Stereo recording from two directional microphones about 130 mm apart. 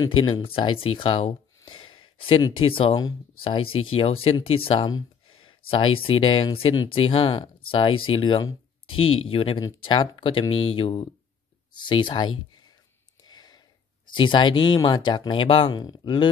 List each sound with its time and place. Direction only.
0.0 s speech: 40° left (ahead or behind)
13.2 s a sound: 30° left (ahead or behind)
14.1 s speech: 40° left (ahead or behind)